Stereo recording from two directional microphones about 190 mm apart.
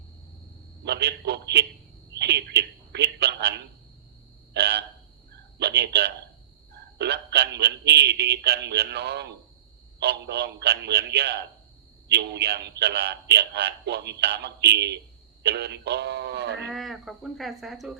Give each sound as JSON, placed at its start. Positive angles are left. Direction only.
{"t": 0.9, "sound": "a man's voice", "side_deg": -60}
{"t": 4.5, "sound": "a sound", "side_deg": -60}
{"t": 5.5, "sound": "a man's voice", "side_deg": -60}
{"t": 16.7, "sound": "speech", "side_deg": 0}